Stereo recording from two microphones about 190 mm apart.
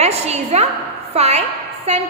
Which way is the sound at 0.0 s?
35° right (ahead or behind).